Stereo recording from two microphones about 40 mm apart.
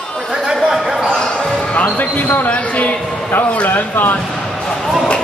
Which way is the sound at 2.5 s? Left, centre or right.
Left.